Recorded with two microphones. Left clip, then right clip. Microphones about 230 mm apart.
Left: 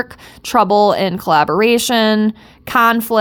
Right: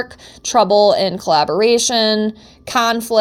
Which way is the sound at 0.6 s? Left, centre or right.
Left.